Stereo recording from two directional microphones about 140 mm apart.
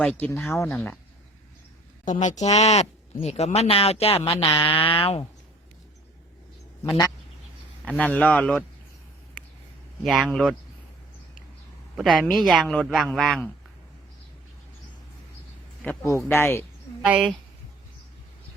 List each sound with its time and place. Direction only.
0.0 s speech: 10° left (ahead or behind)
0.7 s speech: 5° left (ahead or behind)
2.0 s speech: 60° left (ahead or behind); by 5.2 s 40° left (ahead or behind)
6.8 s speech: 25° left (ahead or behind)
7.9 s speech: 10° left (ahead or behind)
10.0 s speech: centre (ahead or behind)
11.9 s speech: 5° right (ahead or behind)
16.3 s speech: 15° left (ahead or behind)